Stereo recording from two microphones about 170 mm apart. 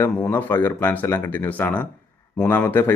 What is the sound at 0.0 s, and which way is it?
Speech, 10° left (ahead or behind).